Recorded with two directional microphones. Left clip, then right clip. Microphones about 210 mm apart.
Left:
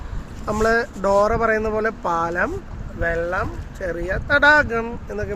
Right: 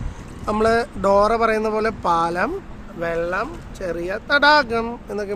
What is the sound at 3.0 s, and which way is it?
Speech, 15° right (ahead or behind).